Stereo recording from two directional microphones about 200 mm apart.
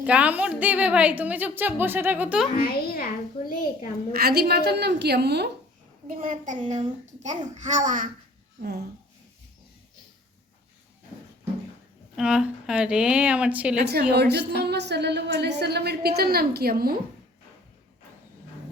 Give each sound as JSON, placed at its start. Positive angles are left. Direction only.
{"t": 0.0, "sound": "a woman's voice", "side_deg": -5}
{"t": 2.6, "sound": "a child's voice", "side_deg": 45}
{"t": 4.1, "sound": "a woman's voice", "side_deg": -50}
{"t": 6.1, "sound": "a child's voice", "side_deg": -30}
{"t": 12.1, "sound": "speech", "side_deg": -5}
{"t": 14.1, "sound": "a woman's voice", "side_deg": -55}